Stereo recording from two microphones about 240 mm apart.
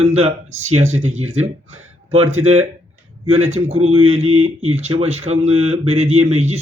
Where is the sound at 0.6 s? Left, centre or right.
Right.